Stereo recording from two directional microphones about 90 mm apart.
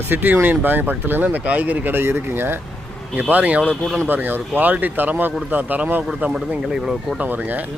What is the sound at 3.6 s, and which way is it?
Speech, 10° left (ahead or behind).